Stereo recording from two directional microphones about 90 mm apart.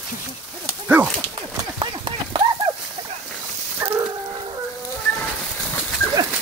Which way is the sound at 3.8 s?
30° right (ahead or behind).